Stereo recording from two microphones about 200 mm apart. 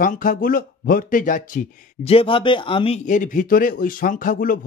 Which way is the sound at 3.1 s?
40° left (ahead or behind).